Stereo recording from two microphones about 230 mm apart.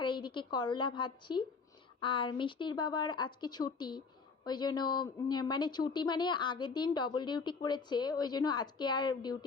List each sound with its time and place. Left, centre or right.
0.0 s a woman's voice: centre